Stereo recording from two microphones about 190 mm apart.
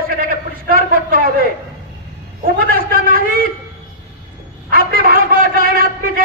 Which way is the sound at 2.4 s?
50° right (ahead or behind).